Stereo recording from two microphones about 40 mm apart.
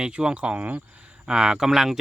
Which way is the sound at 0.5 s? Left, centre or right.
Right.